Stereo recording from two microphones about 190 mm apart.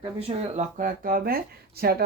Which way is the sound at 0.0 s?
30° right (ahead or behind).